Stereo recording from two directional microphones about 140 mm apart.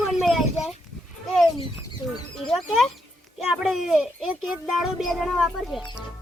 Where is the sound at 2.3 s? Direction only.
Centre (ahead or behind).